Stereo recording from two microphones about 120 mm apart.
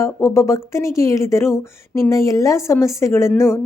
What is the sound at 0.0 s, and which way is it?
A woman's voice, 25° left (ahead or behind).